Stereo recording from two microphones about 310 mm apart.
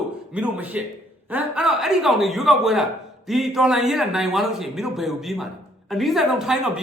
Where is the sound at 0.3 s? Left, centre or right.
Centre.